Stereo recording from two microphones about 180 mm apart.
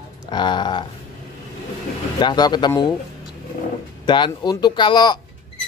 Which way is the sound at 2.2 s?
25° left (ahead or behind).